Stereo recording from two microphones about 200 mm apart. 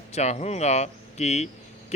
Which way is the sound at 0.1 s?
35° left (ahead or behind).